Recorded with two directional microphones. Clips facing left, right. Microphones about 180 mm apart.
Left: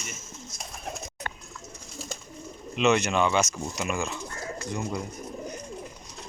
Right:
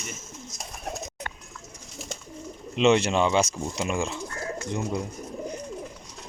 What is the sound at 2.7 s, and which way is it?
Speech, 30° right (ahead or behind).